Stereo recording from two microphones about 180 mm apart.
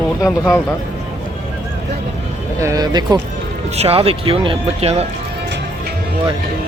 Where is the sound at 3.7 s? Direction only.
35° right (ahead or behind).